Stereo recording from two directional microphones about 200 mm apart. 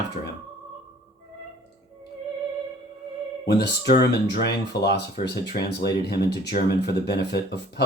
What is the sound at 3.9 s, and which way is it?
Speech, 55° left (ahead or behind).